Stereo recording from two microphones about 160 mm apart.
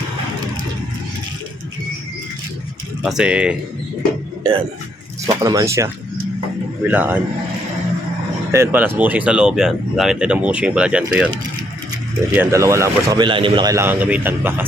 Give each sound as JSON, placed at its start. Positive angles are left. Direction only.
{"t": 3.0, "sound": "speech", "side_deg": -5}
{"t": 5.2, "sound": "speech", "side_deg": -20}
{"t": 8.5, "sound": "speech", "side_deg": -15}
{"t": 12.3, "sound": "a man's voice", "side_deg": -15}